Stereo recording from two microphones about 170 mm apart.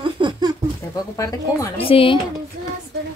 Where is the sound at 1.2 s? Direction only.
20° left (ahead or behind).